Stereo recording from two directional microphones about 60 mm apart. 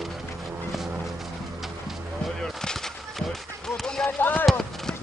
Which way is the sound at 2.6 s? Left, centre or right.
Centre.